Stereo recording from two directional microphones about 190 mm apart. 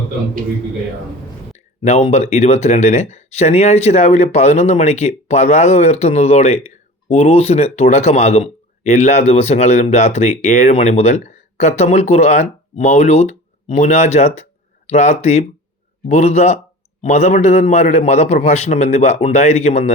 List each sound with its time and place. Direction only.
1.8 s speech: 35° left (ahead or behind)